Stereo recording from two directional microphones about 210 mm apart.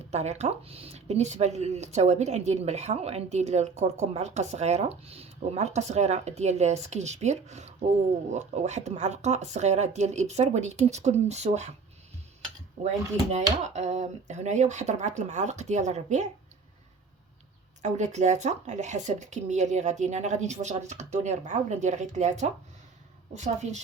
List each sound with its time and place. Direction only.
0.1 s speech: 30° right (ahead or behind)
12.8 s speech: 35° right (ahead or behind)
17.8 s speech: 35° right (ahead or behind)